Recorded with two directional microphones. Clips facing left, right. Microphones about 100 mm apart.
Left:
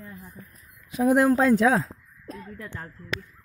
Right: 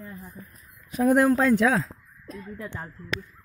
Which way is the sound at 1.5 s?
35° left (ahead or behind).